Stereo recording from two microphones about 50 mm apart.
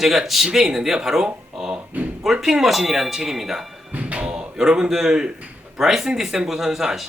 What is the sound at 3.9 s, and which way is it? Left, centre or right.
Door, right.